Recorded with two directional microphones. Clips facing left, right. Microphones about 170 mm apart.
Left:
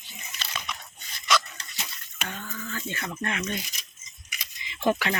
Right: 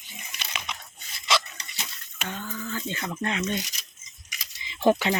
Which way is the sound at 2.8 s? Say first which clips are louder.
Right 1 dB; 20° right (ahead or behind).